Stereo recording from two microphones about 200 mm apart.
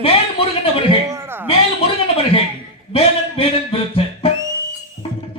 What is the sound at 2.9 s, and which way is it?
Music, 30° left (ahead or behind).